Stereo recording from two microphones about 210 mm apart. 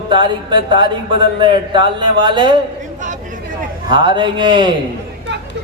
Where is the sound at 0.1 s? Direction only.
20° right (ahead or behind).